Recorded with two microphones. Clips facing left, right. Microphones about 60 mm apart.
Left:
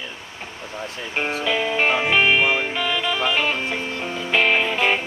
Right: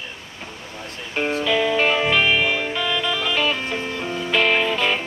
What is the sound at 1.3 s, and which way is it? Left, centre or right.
Music, centre.